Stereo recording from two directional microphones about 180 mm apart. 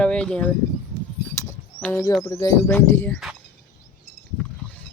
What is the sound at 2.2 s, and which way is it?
Speech, 20° left (ahead or behind).